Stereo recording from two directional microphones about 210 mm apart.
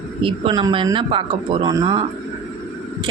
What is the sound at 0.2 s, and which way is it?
A woman's voice, 25° right (ahead or behind).